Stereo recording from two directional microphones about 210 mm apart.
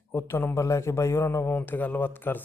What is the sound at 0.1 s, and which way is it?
A man's voice, 10° left (ahead or behind).